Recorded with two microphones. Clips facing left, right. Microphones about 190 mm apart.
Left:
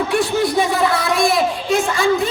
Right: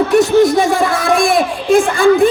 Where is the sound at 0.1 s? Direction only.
45° right (ahead or behind).